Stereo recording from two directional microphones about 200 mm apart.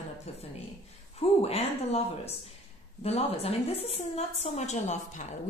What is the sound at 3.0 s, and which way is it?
A woman's voice, 30° left (ahead or behind).